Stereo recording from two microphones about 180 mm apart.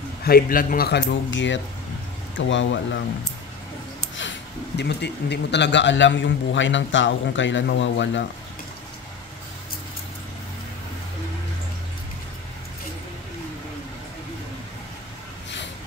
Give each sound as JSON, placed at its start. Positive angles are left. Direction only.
{"t": 0.2, "sound": "speech", "side_deg": 55}
{"t": 4.2, "sound": "speech", "side_deg": 80}